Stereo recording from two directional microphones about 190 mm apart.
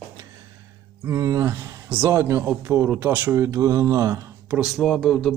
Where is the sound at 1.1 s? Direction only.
15° right (ahead or behind).